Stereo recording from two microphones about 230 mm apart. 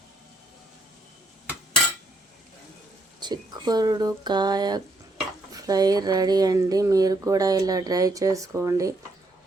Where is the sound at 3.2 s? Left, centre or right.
Centre.